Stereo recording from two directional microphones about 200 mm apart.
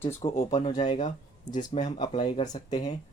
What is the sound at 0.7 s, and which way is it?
Speech, 20° left (ahead or behind).